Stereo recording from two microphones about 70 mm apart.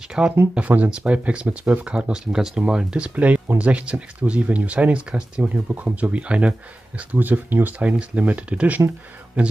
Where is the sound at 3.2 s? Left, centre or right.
Right.